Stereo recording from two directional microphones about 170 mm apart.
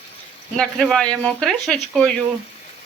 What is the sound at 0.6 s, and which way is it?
Speech, 5° left (ahead or behind).